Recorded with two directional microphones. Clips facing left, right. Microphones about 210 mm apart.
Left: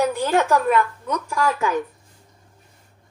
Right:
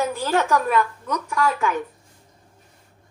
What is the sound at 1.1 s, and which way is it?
Speech, 35° left (ahead or behind).